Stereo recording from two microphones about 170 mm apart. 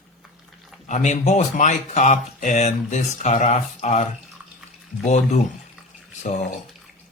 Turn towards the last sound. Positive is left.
turn(degrees=45)  # may be behind; listen again after turning